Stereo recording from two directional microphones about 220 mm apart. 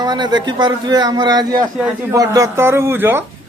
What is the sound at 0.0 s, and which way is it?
A man's voice, 20° right (ahead or behind).